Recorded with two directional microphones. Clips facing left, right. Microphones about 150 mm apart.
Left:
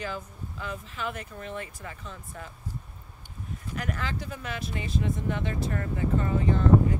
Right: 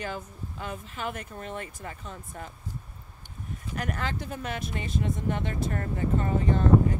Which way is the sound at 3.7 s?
50° right (ahead or behind).